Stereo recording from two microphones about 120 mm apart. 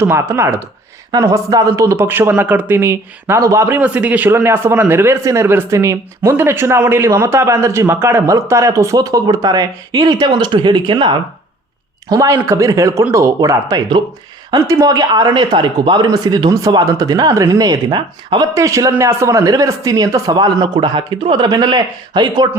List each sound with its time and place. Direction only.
0.0 s a man's voice: 20° right (ahead or behind)
3.8 s a man's voice: 10° right (ahead or behind); by 18.4 s 40° right (ahead or behind)
18.5 s a man's voice: 25° right (ahead or behind)